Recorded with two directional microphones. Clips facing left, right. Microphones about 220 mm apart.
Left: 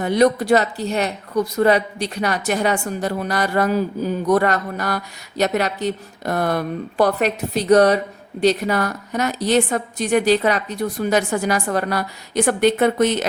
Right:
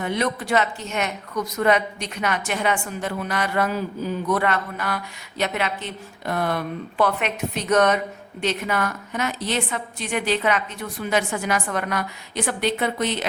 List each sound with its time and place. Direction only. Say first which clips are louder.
0.0 s speech: left 8 dB; 40° left (ahead or behind)